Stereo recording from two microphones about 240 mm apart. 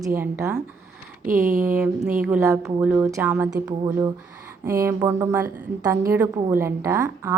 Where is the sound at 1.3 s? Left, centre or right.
Right.